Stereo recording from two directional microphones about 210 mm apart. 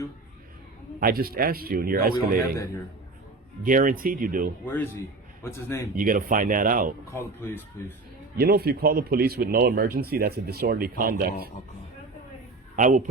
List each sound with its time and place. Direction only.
0.9 s speech: 45° right (ahead or behind)
3.6 s speech: 40° right (ahead or behind)
4.6 s speech: 10° left (ahead or behind)
6.0 s speech: 40° right (ahead or behind)
7.1 s speech: 10° left (ahead or behind)
8.4 s speech: 50° right (ahead or behind)
12.7 s speech: 40° right (ahead or behind)